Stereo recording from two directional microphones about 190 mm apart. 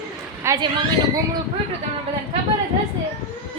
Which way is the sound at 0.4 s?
20° right (ahead or behind).